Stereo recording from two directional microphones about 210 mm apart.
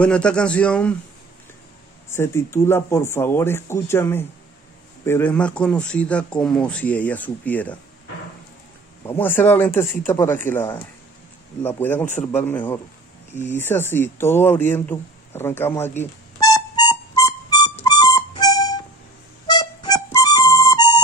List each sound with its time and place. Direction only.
0.0 s speech: 5° left (ahead or behind)
2.0 s a man's voice: 10° left (ahead or behind)
9.2 s a man's voice: 10° left (ahead or behind)
13.3 s speech: 35° left (ahead or behind)
13.6 s a man's voice: 10° left (ahead or behind)
16.0 s music: 15° left (ahead or behind)